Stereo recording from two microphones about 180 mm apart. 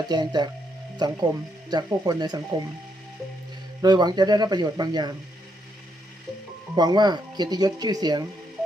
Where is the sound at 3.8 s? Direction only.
25° right (ahead or behind).